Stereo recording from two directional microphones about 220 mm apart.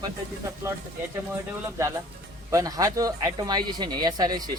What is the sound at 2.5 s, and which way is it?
Speech, 15° right (ahead or behind).